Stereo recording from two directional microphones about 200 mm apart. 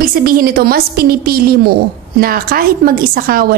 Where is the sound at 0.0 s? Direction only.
45° right (ahead or behind).